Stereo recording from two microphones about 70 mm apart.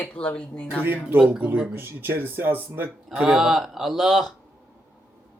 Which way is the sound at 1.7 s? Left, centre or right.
Right.